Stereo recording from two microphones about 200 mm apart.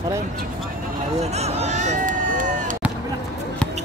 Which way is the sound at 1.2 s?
35° right (ahead or behind).